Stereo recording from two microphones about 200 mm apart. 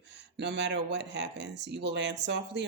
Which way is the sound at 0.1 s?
60° right (ahead or behind).